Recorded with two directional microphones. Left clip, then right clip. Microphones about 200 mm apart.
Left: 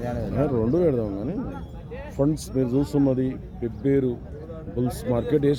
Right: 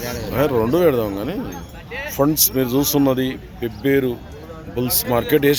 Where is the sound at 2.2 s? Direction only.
20° right (ahead or behind).